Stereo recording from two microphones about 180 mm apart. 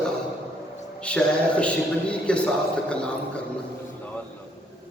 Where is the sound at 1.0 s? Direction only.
5° left (ahead or behind).